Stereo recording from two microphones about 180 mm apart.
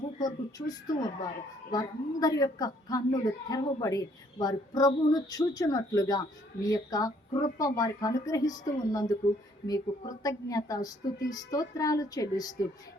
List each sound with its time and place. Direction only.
0.2 s a woman's voice: 20° left (ahead or behind)